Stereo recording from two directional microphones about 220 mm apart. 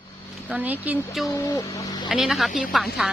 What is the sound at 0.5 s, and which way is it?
Speech, 5° right (ahead or behind).